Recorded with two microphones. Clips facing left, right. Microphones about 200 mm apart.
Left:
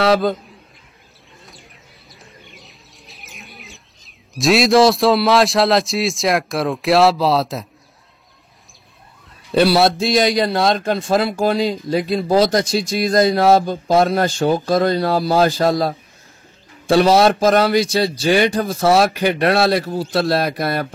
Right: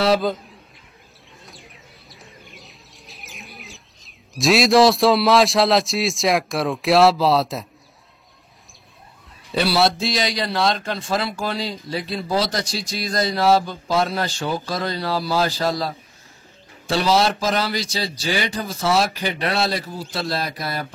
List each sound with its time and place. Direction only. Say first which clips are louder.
0.0 s a man's voice: left 3 dB; centre (ahead or behind)
1.4 s bird: right 1 dB; centre (ahead or behind)
9.6 s a man's voice: left 5 dB; 55° left (ahead or behind)